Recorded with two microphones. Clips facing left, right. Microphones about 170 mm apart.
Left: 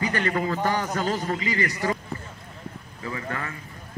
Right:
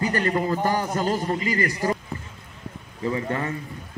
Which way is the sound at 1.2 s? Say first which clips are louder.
Right 2 dB; 40° right (ahead or behind).